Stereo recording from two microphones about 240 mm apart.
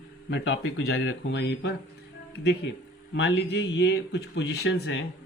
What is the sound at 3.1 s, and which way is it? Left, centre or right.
Speech, left.